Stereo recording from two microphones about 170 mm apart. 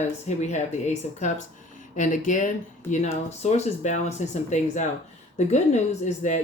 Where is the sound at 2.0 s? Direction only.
50° left (ahead or behind).